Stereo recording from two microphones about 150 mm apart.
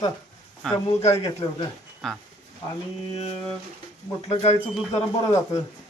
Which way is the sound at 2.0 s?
5° left (ahead or behind).